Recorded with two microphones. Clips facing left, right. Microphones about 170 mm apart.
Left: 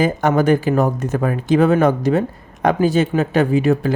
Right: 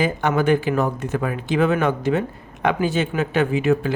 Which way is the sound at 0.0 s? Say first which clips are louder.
Left 4 dB; 45° left (ahead or behind).